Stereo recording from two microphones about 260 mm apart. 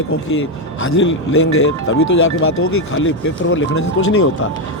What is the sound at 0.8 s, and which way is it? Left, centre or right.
Speech, left.